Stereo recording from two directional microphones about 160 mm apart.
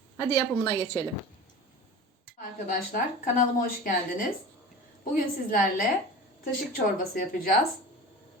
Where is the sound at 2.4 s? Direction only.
60° left (ahead or behind).